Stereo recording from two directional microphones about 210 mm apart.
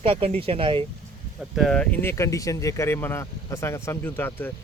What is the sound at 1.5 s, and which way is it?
Speech, centre (ahead or behind).